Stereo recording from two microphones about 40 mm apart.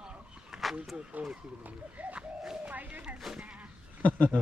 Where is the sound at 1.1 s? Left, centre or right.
Right.